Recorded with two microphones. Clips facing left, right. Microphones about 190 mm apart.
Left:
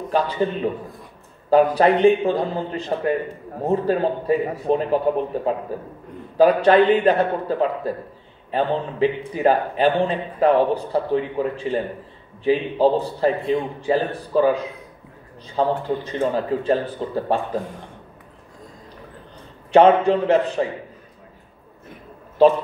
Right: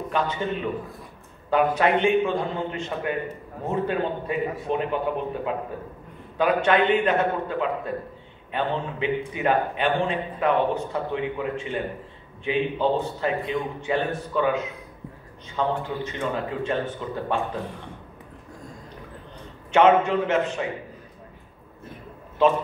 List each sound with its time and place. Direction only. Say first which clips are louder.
0.1 s a man's voice: left 6 dB; 35° left (ahead or behind)
19.7 s a man's voice: left 4 dB; 35° left (ahead or behind)